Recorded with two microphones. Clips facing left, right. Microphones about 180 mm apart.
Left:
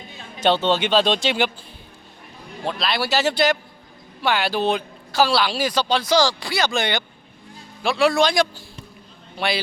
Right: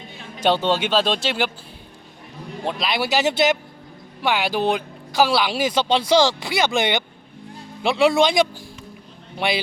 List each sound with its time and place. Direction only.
0.3 s speech: 10° right (ahead or behind)
2.6 s a man's voice: 15° right (ahead or behind)